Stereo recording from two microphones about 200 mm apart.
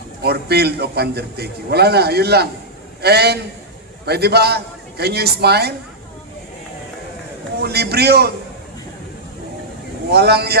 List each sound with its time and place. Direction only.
0.2 s a man's voice: 55° right (ahead or behind)
7.6 s a man's voice: 55° right (ahead or behind)
10.1 s speech: 55° right (ahead or behind)